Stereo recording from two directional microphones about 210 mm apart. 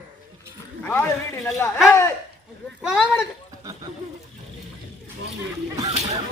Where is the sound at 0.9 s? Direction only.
10° left (ahead or behind).